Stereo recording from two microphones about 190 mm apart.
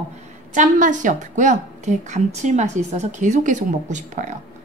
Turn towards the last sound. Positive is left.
turn(degrees=-40)  # may be behind; listen again after turning